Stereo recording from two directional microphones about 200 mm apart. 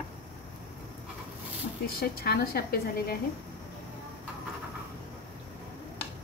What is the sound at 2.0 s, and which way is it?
A woman's voice, 50° left (ahead or behind).